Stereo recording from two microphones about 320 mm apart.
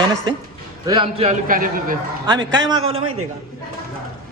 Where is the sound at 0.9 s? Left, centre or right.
Centre.